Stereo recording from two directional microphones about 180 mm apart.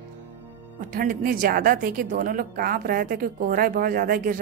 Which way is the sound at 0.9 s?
55° right (ahead or behind).